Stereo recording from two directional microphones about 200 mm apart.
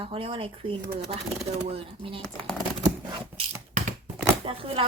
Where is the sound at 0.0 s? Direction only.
25° right (ahead or behind).